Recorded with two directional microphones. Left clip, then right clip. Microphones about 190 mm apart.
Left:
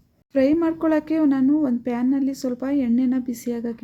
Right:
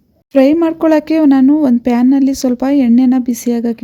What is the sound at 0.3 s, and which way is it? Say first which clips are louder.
Speech: right 9 dB; 40° right (ahead or behind).